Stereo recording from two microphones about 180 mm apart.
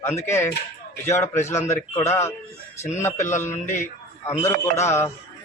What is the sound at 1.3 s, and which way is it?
A man's voice, 15° left (ahead or behind).